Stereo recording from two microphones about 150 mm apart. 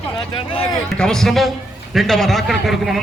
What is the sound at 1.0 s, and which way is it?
Speech, 5° left (ahead or behind).